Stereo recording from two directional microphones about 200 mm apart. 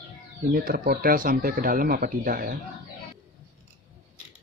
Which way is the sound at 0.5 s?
45° right (ahead or behind).